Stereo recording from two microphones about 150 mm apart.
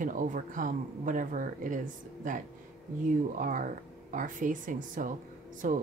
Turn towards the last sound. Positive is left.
turn(degrees=-60)  # may be behind; listen again after turning